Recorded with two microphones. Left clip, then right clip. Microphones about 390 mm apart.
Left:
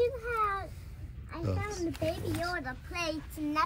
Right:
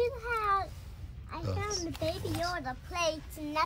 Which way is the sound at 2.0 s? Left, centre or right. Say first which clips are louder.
Even; centre.